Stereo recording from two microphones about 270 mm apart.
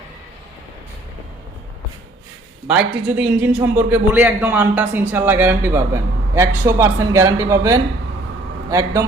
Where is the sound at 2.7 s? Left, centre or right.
Centre.